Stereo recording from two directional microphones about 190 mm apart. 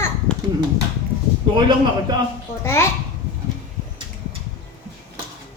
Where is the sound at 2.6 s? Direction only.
15° left (ahead or behind).